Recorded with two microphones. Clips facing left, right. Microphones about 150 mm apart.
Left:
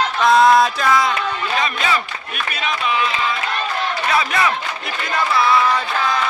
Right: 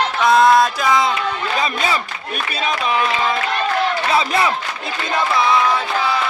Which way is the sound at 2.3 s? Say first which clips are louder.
Right 2 dB; 35° right (ahead or behind).